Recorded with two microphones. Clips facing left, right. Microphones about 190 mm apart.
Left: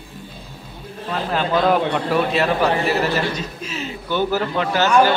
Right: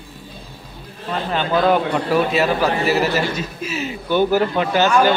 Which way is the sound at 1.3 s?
Centre (ahead or behind).